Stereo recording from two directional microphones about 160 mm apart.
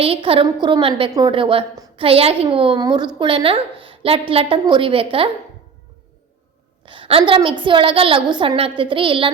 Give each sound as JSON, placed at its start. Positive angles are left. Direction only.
{"t": 0.0, "sound": "a woman's voice", "side_deg": -35}
{"t": 6.8, "sound": "a woman's voice", "side_deg": -30}